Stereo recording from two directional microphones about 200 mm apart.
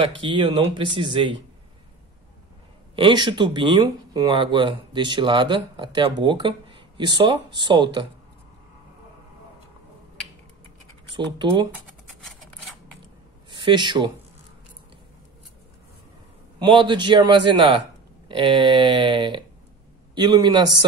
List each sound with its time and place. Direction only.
0.0 s speech: 25° right (ahead or behind)
3.0 s speech: 25° right (ahead or behind)
11.1 s speech: 25° right (ahead or behind)
11.7 s a sound: centre (ahead or behind)
13.5 s speech: 25° right (ahead or behind)
16.5 s speech: 25° right (ahead or behind)